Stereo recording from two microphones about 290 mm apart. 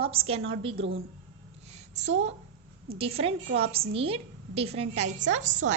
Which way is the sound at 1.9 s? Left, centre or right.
Right.